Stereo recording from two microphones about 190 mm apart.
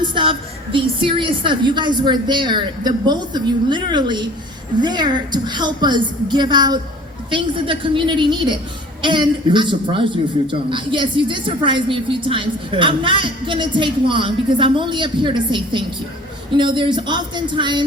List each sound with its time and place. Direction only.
0.0 s a man's voice: 25° right (ahead or behind)